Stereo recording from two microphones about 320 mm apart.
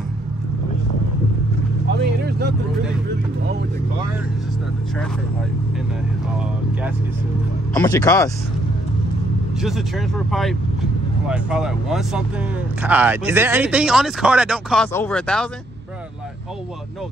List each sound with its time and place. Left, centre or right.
2.2 s vehicle: right
7.7 s speech: centre
9.6 s speech: centre